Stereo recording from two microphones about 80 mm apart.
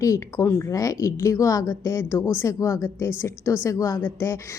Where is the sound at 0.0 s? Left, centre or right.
Left.